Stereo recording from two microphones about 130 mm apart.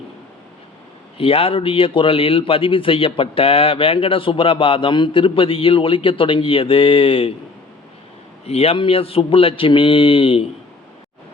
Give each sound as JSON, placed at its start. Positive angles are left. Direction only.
{"t": 1.2, "sound": "a man's voice", "side_deg": 45}
{"t": 8.4, "sound": "a man's voice", "side_deg": 50}